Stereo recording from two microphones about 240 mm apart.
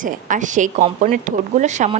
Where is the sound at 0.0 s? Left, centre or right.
Right.